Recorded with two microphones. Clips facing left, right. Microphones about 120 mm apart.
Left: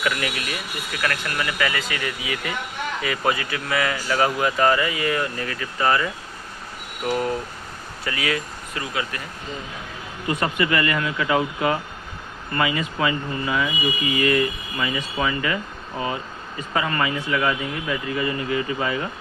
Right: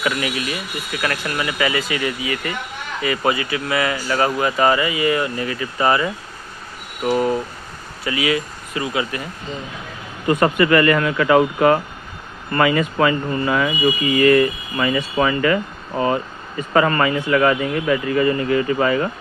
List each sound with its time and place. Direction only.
0.0 s speech: 10° right (ahead or behind)
2.2 s speech: 5° left (ahead or behind); by 6.0 s 15° right (ahead or behind)
7.1 s speech: 15° right (ahead or behind)
10.2 s a man's voice: 50° right (ahead or behind)